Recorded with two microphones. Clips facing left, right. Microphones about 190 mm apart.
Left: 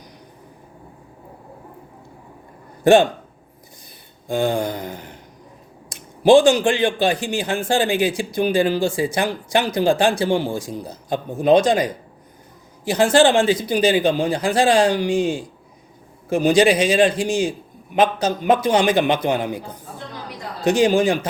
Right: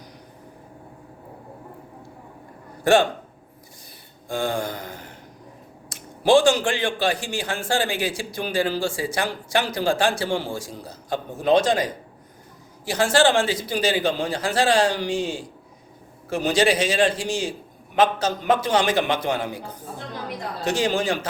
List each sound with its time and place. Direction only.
2.8 s a man's voice: 20° left (ahead or behind)
4.3 s a man's voice: 20° left (ahead or behind)
20.7 s a man's voice: 15° left (ahead or behind)